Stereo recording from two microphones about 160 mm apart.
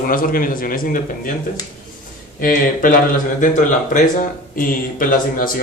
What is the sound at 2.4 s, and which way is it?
Speech, 60° left (ahead or behind).